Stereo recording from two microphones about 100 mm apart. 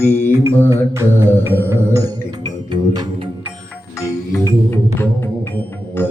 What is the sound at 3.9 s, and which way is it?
Music, 30° left (ahead or behind).